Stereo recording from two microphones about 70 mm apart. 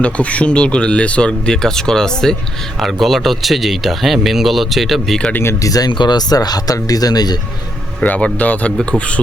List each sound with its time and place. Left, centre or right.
0.0 s speech: centre
5.6 s speech: left
8.0 s speech: left